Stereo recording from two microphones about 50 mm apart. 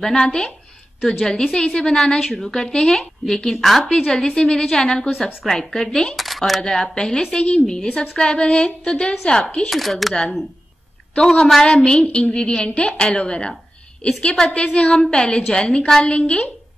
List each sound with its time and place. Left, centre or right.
0.0 s a woman's voice: centre
2.1 s a woman's voice: centre
2.7 s a woman's voice: centre
3.3 s a woman's voice: centre; by 7.6 s left
7.6 s a woman's voice: centre
9.6 s a woman's voice: centre
11.1 s a woman's voice: centre
11.8 s a woman's voice: centre
14.5 s a woman's voice: left